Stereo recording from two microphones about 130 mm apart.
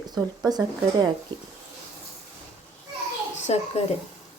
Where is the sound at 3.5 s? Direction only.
55° left (ahead or behind).